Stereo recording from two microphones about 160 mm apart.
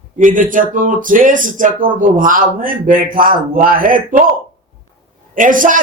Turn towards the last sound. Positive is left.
turn(degrees=-55)  # may be behind; listen again after turning